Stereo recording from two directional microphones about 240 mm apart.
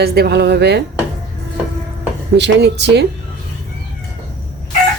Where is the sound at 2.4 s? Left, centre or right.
Right.